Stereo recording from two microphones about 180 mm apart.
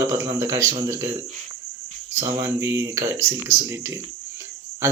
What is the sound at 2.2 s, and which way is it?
Speech, 15° right (ahead or behind).